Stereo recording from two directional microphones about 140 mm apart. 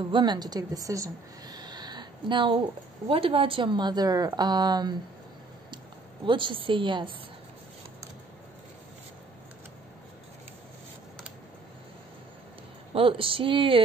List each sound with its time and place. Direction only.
0.1 s a woman's voice: 30° right (ahead or behind)
6.2 s a woman's voice: 35° right (ahead or behind)
12.9 s a woman's voice: 40° right (ahead or behind)